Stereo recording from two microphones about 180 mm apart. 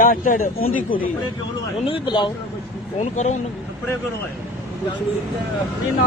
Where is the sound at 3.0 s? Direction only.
40° left (ahead or behind).